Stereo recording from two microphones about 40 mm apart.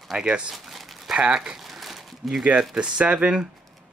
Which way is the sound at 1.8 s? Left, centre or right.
Centre.